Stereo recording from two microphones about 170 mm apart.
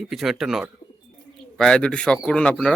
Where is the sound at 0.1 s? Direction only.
Centre (ahead or behind).